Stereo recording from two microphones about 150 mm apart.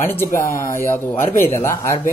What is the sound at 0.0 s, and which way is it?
Speech, 15° left (ahead or behind).